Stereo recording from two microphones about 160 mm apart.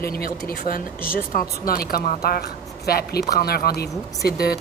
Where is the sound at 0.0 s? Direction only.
70° left (ahead or behind).